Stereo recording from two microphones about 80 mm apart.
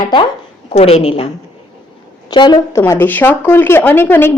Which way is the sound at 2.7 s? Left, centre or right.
Left.